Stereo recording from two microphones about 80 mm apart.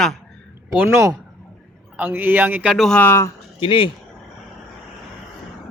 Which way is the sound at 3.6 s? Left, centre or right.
Left.